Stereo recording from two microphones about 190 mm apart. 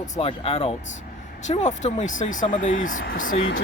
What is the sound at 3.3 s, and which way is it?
Speech, 90° left.